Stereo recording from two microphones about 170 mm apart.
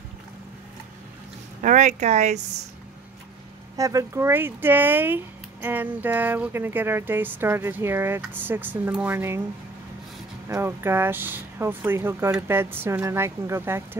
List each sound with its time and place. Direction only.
1.6 s speech: 45° right (ahead or behind)
3.7 s speech: 20° right (ahead or behind)
10.5 s speech: 15° right (ahead or behind)